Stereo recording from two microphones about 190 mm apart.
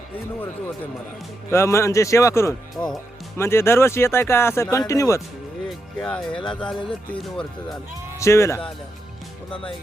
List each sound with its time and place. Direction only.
0.3 s speech: 10° left (ahead or behind)
6.0 s speech: 5° left (ahead or behind)
8.2 s speech: 15° left (ahead or behind)